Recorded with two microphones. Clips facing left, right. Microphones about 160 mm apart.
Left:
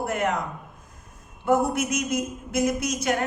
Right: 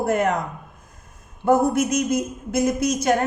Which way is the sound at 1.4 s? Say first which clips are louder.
Right 4 dB; 40° right (ahead or behind).